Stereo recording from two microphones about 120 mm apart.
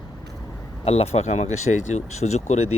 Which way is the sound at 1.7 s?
90° left.